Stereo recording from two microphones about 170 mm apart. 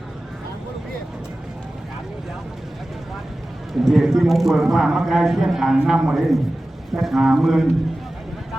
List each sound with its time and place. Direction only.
3.8 s a man's voice: centre (ahead or behind)